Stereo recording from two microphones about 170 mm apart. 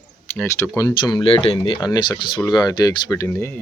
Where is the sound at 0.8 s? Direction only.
20° left (ahead or behind).